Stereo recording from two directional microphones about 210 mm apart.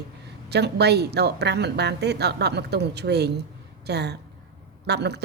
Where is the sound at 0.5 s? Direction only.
55° right (ahead or behind).